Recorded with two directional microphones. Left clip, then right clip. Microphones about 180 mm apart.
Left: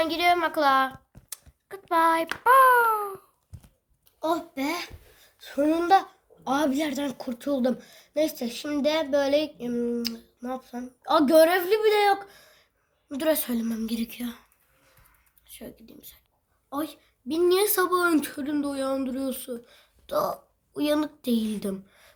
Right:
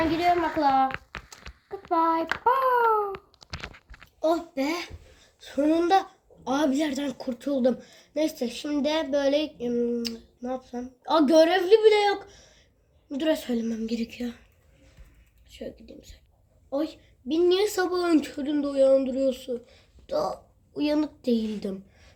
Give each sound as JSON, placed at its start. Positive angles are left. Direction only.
{"t": 0.1, "sound": "a woman's voice", "side_deg": 35}
{"t": 1.3, "sound": "a sound", "side_deg": 40}
{"t": 2.4, "sound": "hands", "side_deg": 35}
{"t": 4.2, "sound": "speech", "side_deg": 40}
{"t": 15.4, "sound": "a woman's voice", "side_deg": 45}